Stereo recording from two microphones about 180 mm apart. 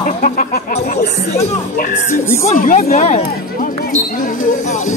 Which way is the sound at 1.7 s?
50° left (ahead or behind).